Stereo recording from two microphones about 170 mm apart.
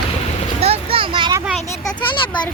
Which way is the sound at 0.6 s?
35° right (ahead or behind).